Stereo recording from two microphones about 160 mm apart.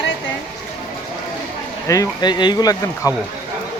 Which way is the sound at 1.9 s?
25° left (ahead or behind).